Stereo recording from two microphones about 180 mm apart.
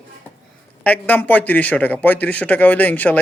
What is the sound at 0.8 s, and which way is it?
A man's voice, 10° left (ahead or behind).